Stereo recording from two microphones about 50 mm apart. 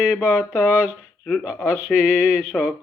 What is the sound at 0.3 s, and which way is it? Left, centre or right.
Speech, left.